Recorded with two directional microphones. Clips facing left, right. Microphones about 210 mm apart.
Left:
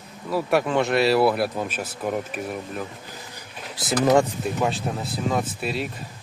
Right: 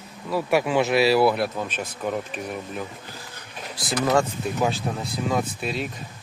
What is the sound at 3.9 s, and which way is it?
Speech, 20° left (ahead or behind).